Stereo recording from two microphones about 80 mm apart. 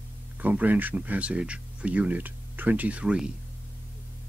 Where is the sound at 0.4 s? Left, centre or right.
Right.